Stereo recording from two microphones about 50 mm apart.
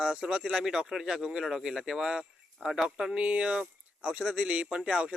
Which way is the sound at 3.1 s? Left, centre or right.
Right.